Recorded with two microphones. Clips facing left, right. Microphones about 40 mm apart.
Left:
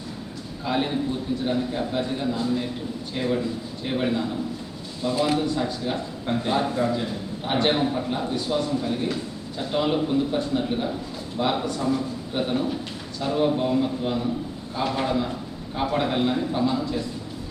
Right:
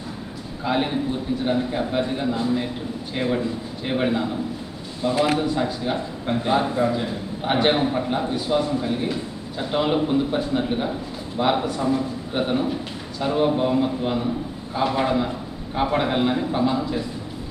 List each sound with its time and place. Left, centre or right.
0.6 s a man's voice: centre
5.1 s a man's voice: right
5.4 s a man's voice: centre